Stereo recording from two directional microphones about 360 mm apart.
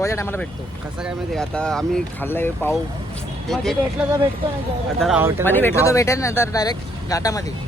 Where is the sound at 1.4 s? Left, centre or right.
Centre.